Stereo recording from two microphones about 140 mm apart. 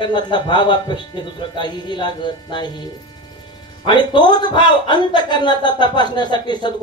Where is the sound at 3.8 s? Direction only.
30° left (ahead or behind).